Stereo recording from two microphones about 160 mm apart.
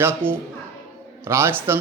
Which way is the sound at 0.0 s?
15° right (ahead or behind).